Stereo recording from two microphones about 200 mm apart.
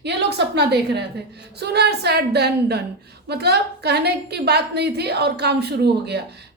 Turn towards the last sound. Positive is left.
turn(degrees=-55)  # may be behind; listen again after turning